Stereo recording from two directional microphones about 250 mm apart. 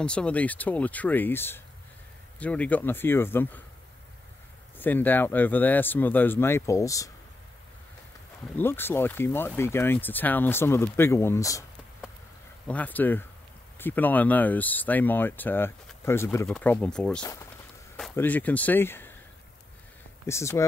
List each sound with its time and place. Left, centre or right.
0.0 s speech: centre
4.7 s speech: centre
8.5 s speech: centre
12.6 s speech: centre
20.2 s speech: centre